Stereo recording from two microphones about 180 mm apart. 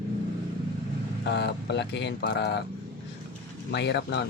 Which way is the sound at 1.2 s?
70° left (ahead or behind).